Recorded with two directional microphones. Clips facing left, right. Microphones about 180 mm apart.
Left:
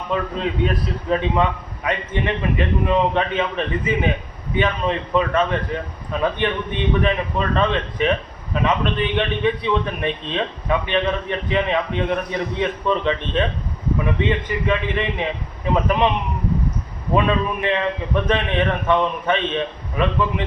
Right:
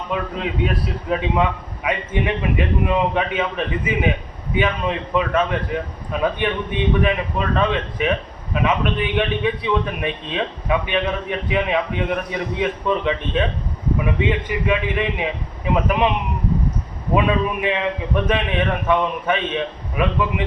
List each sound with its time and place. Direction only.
0.1 s a man's voice: 5° right (ahead or behind)
17.2 s a man's voice: 10° right (ahead or behind)